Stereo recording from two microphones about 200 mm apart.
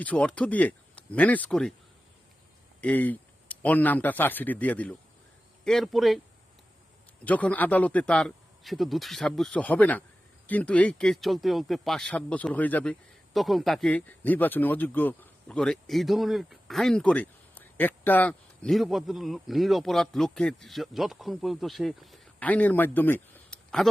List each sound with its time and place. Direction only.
0.0 s speech: 5° left (ahead or behind)
2.8 s speech: 10° left (ahead or behind)
7.3 s speech: 10° left (ahead or behind)